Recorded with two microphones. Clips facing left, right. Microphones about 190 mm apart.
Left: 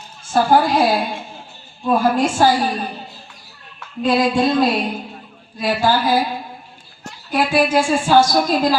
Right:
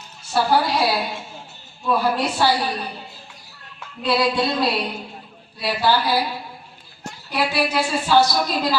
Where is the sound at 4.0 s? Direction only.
45° left (ahead or behind).